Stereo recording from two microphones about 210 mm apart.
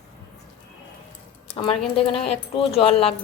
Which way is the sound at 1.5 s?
25° left (ahead or behind).